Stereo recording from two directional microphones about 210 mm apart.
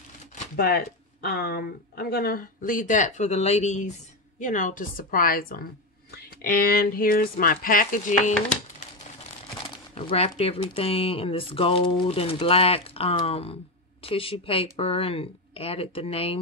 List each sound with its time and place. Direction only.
0.6 s a woman's voice: 50° left (ahead or behind)
9.9 s speech: 30° left (ahead or behind)